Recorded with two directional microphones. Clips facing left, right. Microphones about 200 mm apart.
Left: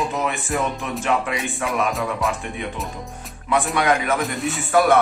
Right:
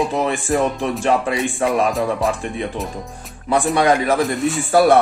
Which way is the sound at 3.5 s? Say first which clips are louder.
Right 4 dB; 35° right (ahead or behind).